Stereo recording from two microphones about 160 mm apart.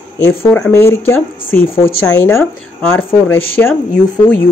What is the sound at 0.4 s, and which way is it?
Speech, 15° left (ahead or behind).